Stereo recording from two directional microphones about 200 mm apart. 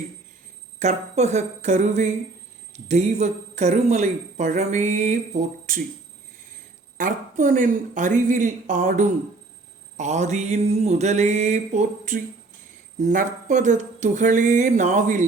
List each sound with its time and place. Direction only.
0.8 s speech: 35° right (ahead or behind)
6.9 s speech: 40° right (ahead or behind)